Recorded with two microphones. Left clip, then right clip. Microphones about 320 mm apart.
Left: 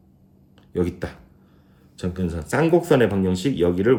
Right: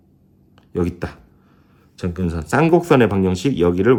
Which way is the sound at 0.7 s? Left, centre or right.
Centre.